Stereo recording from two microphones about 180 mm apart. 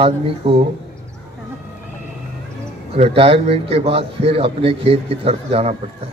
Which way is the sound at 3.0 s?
30° right (ahead or behind).